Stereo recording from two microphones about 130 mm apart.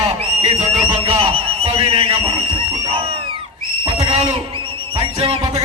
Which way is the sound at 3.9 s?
40° right (ahead or behind).